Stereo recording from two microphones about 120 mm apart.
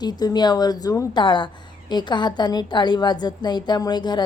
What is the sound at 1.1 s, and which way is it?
A woman's voice, 40° left (ahead or behind).